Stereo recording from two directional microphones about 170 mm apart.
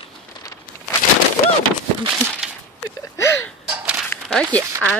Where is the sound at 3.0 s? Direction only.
15° left (ahead or behind).